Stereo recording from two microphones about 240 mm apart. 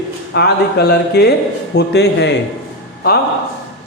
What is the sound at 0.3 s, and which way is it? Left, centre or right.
A man's voice, left.